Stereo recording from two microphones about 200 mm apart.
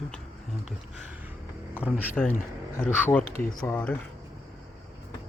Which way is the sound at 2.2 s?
10° left (ahead or behind).